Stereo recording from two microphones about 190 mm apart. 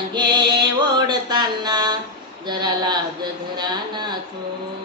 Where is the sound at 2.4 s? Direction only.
25° right (ahead or behind).